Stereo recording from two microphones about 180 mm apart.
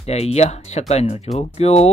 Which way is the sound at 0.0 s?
35° left (ahead or behind).